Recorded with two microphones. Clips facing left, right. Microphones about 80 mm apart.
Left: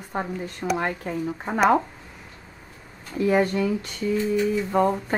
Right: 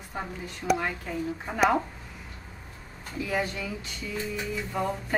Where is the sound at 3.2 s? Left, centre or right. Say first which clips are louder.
Left 9 dB; left.